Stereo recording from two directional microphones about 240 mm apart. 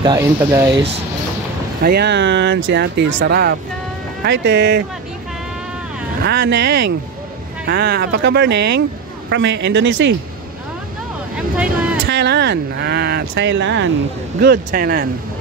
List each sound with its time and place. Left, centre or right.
0.0 s speech: centre
1.9 s speech: right
6.2 s speech: right
11.3 s vehicle: centre
12.1 s speech: right
14.4 s speech: right